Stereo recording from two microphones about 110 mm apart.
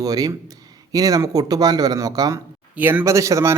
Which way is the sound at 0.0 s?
35° right (ahead or behind).